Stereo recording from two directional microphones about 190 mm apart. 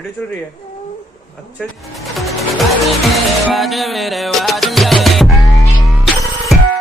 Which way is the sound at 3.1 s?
Centre (ahead or behind).